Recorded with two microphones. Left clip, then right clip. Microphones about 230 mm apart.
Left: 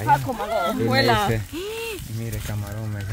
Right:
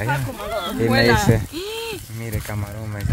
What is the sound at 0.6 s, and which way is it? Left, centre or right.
Speech, centre.